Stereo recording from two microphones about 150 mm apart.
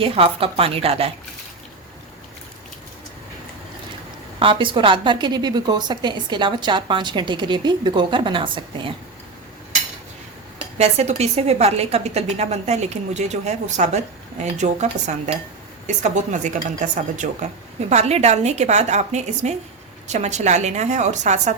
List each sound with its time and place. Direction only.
0.0 s a woman's voice: 40° right (ahead or behind)
4.4 s a woman's voice: 35° right (ahead or behind)
10.8 s a woman's voice: 45° right (ahead or behind)
17.8 s a woman's voice: 45° right (ahead or behind)